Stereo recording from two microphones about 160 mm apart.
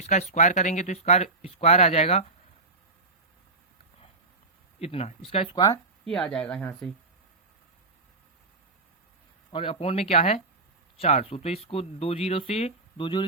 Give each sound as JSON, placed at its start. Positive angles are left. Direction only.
{"t": 0.0, "sound": "speech", "side_deg": 45}
{"t": 4.8, "sound": "speech", "side_deg": 40}
{"t": 6.1, "sound": "speech", "side_deg": 5}
{"t": 9.5, "sound": "speech", "side_deg": 35}